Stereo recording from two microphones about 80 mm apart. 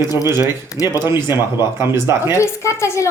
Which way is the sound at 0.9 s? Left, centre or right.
Right.